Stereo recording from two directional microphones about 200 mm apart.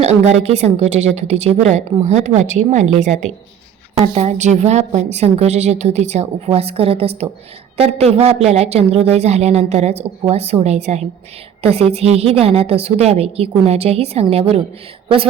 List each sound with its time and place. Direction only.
0.0 s a woman's voice: 30° right (ahead or behind)